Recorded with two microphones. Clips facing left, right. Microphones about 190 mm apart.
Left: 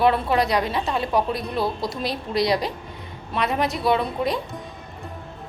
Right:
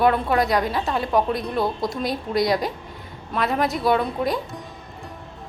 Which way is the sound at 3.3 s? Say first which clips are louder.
Right 1 dB; centre (ahead or behind).